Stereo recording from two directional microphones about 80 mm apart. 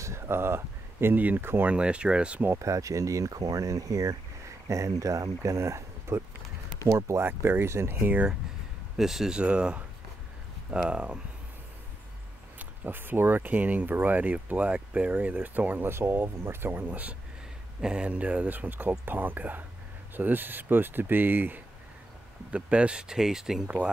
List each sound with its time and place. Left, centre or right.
0.0 s speech: right
1.7 s speech: centre
2.6 s speech: right
8.9 s speech: centre
12.5 s speech: right
22.5 s speech: centre